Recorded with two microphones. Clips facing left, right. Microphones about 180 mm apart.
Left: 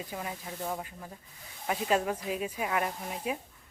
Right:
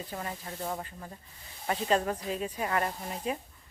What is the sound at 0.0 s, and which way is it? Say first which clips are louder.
Speech: even; 10° left (ahead or behind).